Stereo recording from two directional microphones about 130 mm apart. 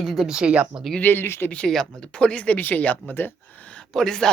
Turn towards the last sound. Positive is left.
turn(degrees=5)  # may be behind; listen again after turning